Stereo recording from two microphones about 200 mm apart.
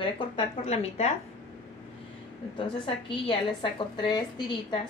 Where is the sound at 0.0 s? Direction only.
30° left (ahead or behind).